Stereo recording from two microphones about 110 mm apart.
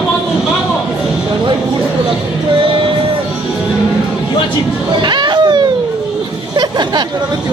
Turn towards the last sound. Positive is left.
turn(degrees=-45)  # may be behind; listen again after turning